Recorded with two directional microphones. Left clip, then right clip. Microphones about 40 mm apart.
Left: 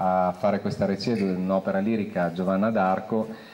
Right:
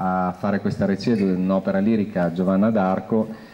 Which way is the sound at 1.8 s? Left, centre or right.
Centre.